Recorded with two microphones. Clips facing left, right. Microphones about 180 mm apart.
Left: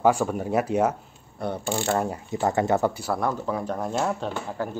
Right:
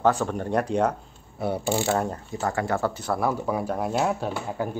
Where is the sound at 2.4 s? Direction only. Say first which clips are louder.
Left 3 dB; 20° left (ahead or behind).